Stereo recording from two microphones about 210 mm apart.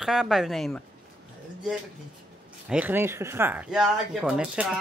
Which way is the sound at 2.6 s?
5° right (ahead or behind).